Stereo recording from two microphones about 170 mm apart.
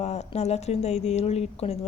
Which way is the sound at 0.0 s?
40° left (ahead or behind).